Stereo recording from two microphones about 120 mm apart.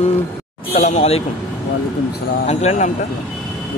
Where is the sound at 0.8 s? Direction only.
70° left (ahead or behind).